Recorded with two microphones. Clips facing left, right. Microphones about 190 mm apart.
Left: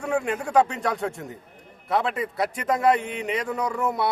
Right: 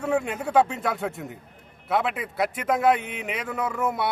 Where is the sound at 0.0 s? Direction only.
5° right (ahead or behind).